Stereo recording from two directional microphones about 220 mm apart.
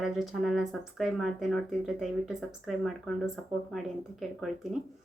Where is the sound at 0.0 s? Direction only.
Centre (ahead or behind).